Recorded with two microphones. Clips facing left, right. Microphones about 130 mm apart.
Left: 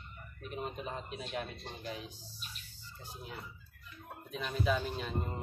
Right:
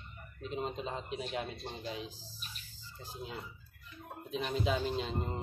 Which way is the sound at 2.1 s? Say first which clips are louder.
Even; 90° right.